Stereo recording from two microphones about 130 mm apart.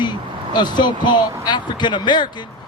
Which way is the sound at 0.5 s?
35° left (ahead or behind).